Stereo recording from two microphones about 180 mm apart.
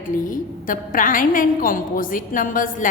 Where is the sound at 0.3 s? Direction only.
50° left (ahead or behind).